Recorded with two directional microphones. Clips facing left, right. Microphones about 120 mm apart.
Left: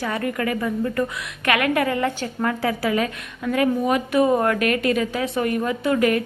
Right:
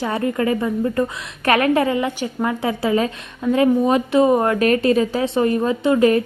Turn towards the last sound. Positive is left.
turn(degrees=-30)  # may be behind; listen again after turning